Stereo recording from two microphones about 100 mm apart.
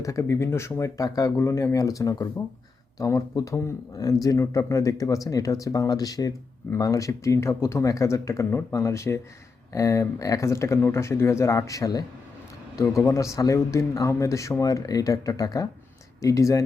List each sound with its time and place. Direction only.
0.0 s speech: 30° left (ahead or behind)